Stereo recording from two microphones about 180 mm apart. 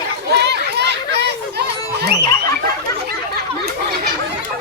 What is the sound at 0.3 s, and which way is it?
Music, 65° right (ahead or behind).